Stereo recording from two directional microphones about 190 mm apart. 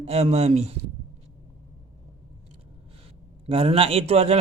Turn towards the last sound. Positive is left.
turn(degrees=-30)  # may be behind; listen again after turning